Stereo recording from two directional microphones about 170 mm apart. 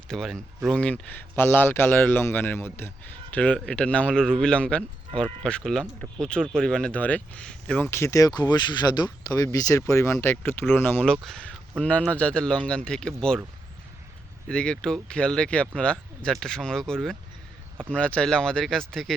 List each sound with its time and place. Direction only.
0.1 s speech: 5° left (ahead or behind)
14.4 s speech: 5° left (ahead or behind)